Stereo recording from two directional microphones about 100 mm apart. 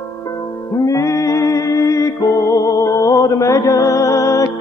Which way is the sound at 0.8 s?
30° left (ahead or behind).